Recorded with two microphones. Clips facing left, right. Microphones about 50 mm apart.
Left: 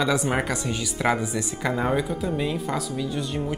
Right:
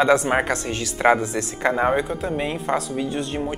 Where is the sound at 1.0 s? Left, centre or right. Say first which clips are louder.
Right 6 dB; right.